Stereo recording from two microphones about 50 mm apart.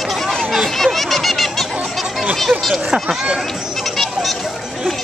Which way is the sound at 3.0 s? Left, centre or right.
Centre.